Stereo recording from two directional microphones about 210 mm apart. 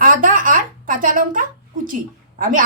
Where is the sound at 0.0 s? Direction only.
40° right (ahead or behind).